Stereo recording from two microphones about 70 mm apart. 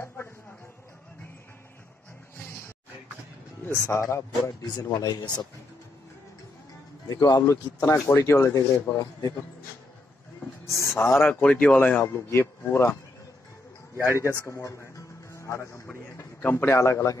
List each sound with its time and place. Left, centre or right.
3.6 s a man's voice: left
4.5 s speech: left
7.1 s speech: left
10.8 s a man's voice: left
12.3 s a man's voice: left
14.1 s a man's voice: left